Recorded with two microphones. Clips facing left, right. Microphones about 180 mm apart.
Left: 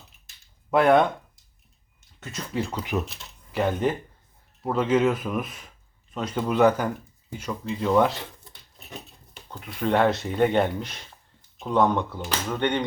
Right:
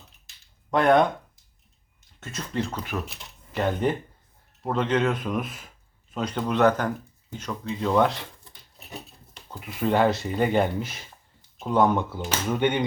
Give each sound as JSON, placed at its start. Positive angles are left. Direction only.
{"t": 0.7, "sound": "speech", "side_deg": 5}
{"t": 2.2, "sound": "speech", "side_deg": 5}
{"t": 9.3, "sound": "speech", "side_deg": -5}